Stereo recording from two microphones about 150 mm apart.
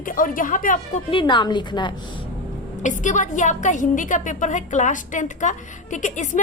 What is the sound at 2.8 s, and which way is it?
A woman's voice, 55° left (ahead or behind).